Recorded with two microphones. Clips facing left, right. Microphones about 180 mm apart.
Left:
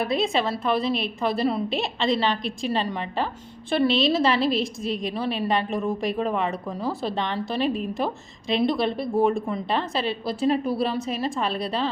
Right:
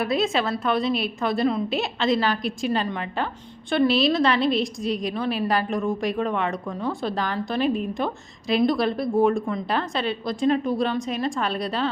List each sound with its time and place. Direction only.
0.0 s a woman's voice: centre (ahead or behind)